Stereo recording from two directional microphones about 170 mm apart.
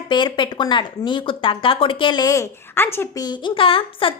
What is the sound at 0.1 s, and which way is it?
A woman's voice, 25° left (ahead or behind).